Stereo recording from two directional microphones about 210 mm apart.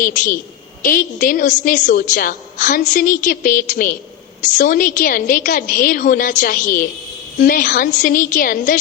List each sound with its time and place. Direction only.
0.0 s a woman's voice: 40° left (ahead or behind)